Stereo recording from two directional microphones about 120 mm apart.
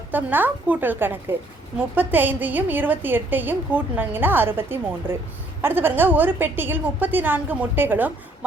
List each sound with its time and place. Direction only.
0.1 s a woman's voice: 15° right (ahead or behind)